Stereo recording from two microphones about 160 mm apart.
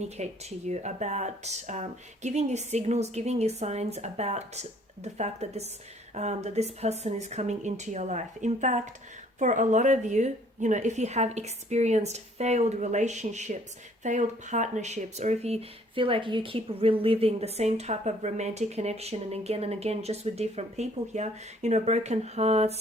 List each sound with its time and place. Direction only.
0.2 s a woman's voice: 45° right (ahead or behind)